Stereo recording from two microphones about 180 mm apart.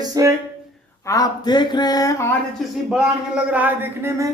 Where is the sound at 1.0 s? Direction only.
20° left (ahead or behind).